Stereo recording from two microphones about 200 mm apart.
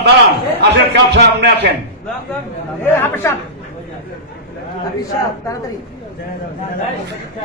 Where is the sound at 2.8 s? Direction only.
10° left (ahead or behind).